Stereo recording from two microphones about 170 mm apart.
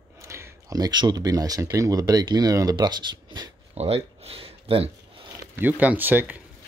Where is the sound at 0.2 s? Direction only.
15° right (ahead or behind).